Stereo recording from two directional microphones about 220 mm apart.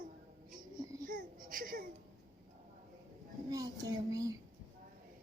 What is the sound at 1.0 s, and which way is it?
Baby cry, 40° right (ahead or behind).